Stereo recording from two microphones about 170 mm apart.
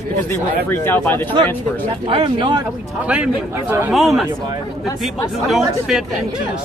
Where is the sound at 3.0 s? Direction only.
5° right (ahead or behind).